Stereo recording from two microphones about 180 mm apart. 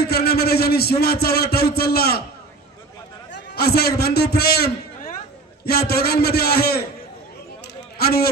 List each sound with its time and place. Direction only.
0.0 s a man's voice: 65° left (ahead or behind)
3.3 s a man's voice: 60° left (ahead or behind)
8.0 s a man's voice: 60° left (ahead or behind)